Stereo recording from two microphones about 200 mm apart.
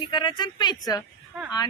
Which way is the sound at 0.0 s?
20° left (ahead or behind).